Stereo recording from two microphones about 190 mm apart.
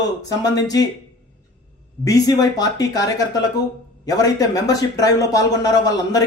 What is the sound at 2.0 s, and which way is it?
Speech, 20° left (ahead or behind).